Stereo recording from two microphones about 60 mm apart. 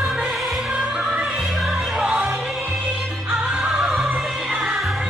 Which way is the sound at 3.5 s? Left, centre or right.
Centre.